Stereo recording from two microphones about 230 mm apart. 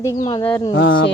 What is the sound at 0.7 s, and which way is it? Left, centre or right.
Speech, left.